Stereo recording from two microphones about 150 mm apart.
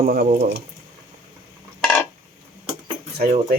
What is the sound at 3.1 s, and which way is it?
Speech, 90° right.